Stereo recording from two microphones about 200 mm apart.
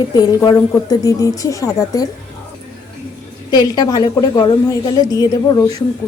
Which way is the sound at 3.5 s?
20° left (ahead or behind).